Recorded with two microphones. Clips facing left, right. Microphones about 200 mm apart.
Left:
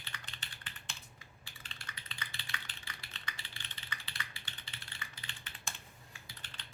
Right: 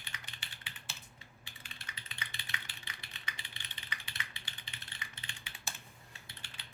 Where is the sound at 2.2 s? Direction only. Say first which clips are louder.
Even; 20° right (ahead or behind).